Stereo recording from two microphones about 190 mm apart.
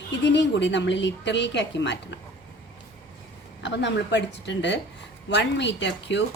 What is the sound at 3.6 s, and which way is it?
A woman's voice, 70° left (ahead or behind).